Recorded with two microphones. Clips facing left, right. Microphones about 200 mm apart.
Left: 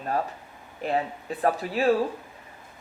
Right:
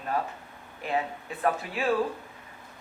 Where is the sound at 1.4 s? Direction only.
35° left (ahead or behind).